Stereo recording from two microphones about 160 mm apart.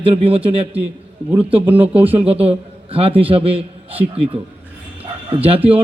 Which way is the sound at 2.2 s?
40° right (ahead or behind).